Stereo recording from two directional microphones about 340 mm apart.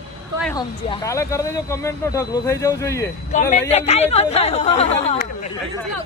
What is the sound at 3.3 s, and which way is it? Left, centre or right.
Speech, centre.